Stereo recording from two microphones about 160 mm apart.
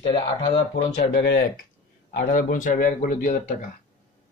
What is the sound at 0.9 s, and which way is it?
Speech, 85° left.